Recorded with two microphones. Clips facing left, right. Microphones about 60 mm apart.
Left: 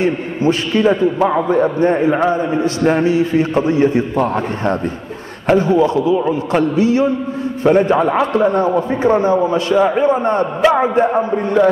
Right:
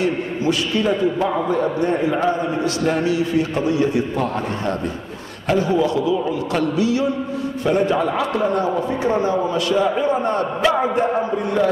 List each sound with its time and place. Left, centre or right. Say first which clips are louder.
0.0 s a man's voice: left 4 dB; left